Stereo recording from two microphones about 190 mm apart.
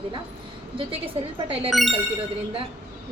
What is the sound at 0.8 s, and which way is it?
A woman's voice, 30° right (ahead or behind).